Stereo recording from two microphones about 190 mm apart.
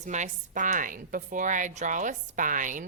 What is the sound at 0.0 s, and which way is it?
A woman's voice, 40° right (ahead or behind).